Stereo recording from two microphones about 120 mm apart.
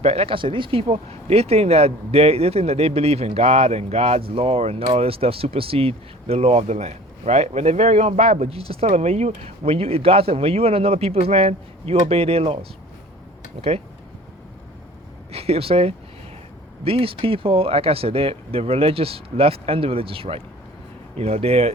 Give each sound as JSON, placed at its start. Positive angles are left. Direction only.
{"t": 0.0, "sound": "speech", "side_deg": -60}
{"t": 13.6, "sound": "speech", "side_deg": -55}
{"t": 15.3, "sound": "speech", "side_deg": -55}